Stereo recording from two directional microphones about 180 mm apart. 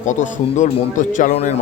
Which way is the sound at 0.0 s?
45° left (ahead or behind).